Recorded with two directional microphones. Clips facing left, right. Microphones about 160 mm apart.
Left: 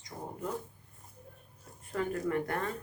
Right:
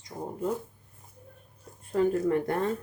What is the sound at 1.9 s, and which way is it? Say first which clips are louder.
Speech: right 7 dB; 30° right (ahead or behind).